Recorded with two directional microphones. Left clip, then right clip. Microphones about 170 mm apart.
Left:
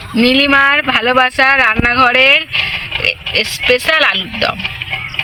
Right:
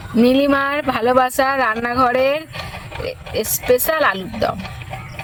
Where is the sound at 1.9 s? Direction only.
Centre (ahead or behind).